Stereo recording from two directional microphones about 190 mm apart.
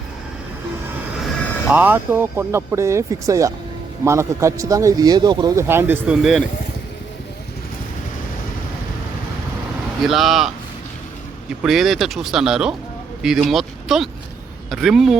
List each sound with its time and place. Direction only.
1.7 s a man's voice: 10° right (ahead or behind)
10.0 s speech: centre (ahead or behind)
11.6 s speech: centre (ahead or behind)